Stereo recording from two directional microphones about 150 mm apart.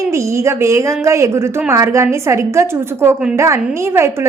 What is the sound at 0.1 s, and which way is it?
A woman's voice, 20° right (ahead or behind).